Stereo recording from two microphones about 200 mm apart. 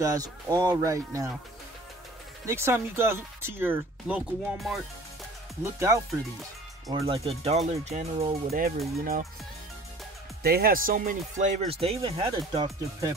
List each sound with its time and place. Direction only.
0.0 s speech: 15° right (ahead or behind)
2.4 s speech: 10° right (ahead or behind)
5.6 s speech: 15° right (ahead or behind)
6.9 s speech: 25° right (ahead or behind)
8.5 s speech: 45° right (ahead or behind)
10.4 s speech: 50° right (ahead or behind); by 13.1 s 15° right (ahead or behind)